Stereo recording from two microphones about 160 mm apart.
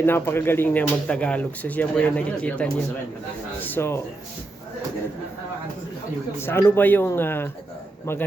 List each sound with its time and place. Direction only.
0.0 s speech: 15° left (ahead or behind)
6.4 s speech: 15° left (ahead or behind)